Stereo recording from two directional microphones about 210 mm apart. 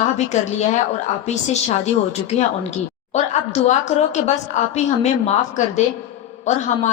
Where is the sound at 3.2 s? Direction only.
35° left (ahead or behind).